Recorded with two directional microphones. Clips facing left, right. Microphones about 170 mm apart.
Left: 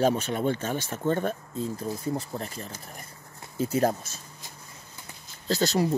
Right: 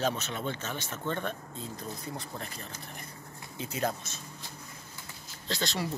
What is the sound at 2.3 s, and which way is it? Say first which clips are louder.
Speech: left 6 dB; 40° left (ahead or behind).